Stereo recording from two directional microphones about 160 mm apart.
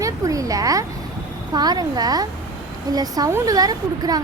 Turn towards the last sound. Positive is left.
turn(degrees=-25)  # may be behind; listen again after turning